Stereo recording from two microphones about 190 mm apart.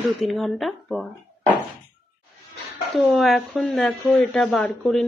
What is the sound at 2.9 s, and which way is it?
A woman's voice, centre (ahead or behind).